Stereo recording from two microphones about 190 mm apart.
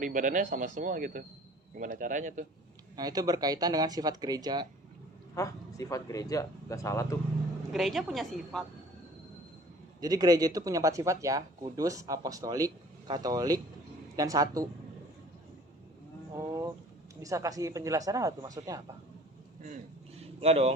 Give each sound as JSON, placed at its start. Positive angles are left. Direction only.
{"t": 0.0, "sound": "a man's voice", "side_deg": -45}
{"t": 2.9, "sound": "speech", "side_deg": -20}
{"t": 5.3, "sound": "speech", "side_deg": 15}
{"t": 7.7, "sound": "speech", "side_deg": 0}
{"t": 10.0, "sound": "speech", "side_deg": -20}
{"t": 17.2, "sound": "speech", "side_deg": -15}
{"t": 20.4, "sound": "speech", "side_deg": -35}